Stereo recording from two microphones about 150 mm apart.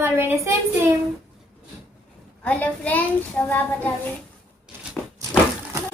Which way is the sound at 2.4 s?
10° left (ahead or behind).